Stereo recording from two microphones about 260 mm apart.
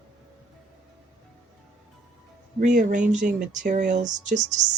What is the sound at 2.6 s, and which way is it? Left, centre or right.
Speech, right.